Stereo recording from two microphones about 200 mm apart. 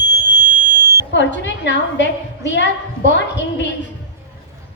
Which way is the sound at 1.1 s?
65° left (ahead or behind).